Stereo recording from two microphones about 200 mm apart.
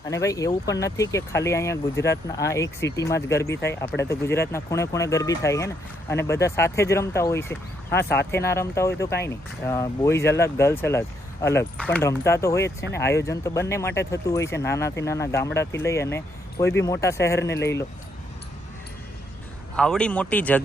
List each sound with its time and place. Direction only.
0.1 s speech: 15° left (ahead or behind)
19.7 s speech: 5° left (ahead or behind)